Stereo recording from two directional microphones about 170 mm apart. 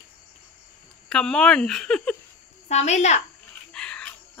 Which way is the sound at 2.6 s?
40° left (ahead or behind).